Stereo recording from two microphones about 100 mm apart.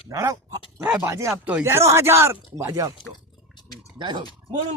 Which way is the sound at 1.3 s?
15° right (ahead or behind).